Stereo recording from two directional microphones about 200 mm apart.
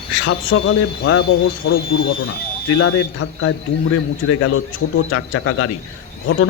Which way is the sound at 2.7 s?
90° left.